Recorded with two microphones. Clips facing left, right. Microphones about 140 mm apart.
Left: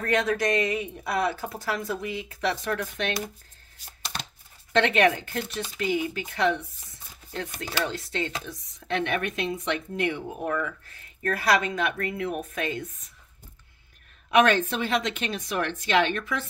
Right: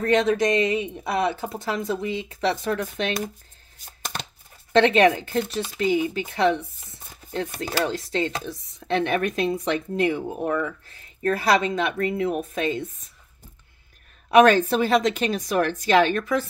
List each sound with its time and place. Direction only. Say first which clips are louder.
0.0 s speech: right 5 dB; 25° right (ahead or behind)
4.7 s speech: right 5 dB; 30° right (ahead or behind)
14.3 s speech: right 5 dB; 40° right (ahead or behind)